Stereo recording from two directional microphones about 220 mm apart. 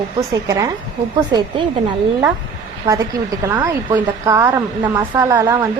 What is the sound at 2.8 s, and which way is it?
Speech, 15° right (ahead or behind).